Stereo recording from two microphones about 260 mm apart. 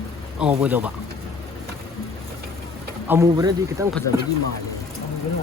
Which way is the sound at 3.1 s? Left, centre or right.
Centre.